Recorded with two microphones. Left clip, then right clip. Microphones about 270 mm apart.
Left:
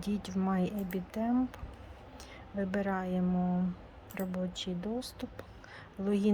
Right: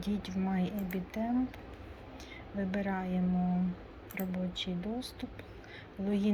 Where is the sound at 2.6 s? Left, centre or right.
Centre.